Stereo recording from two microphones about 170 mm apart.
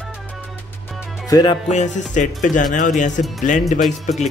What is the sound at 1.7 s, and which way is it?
Speech, 45° left (ahead or behind).